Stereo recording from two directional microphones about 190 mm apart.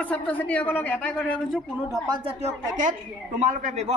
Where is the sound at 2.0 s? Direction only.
25° right (ahead or behind).